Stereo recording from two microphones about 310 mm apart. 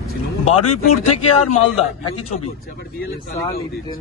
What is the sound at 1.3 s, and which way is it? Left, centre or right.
Speech, left.